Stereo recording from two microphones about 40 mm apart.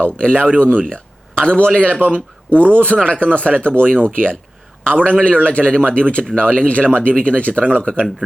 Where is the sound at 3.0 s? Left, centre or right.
Left.